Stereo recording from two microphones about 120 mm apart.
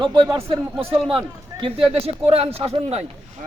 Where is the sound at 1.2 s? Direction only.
45° right (ahead or behind).